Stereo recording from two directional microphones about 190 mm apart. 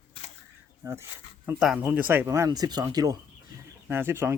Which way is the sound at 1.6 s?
5° right (ahead or behind).